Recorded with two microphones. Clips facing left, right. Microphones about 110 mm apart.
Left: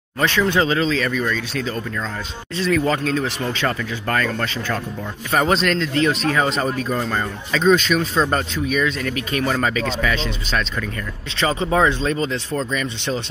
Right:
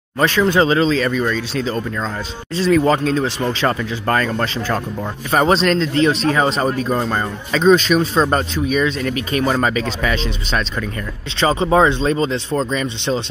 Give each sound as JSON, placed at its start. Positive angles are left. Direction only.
{"t": 0.2, "sound": "speech", "side_deg": -40}